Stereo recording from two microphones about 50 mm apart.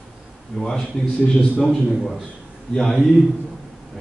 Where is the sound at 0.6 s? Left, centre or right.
Centre.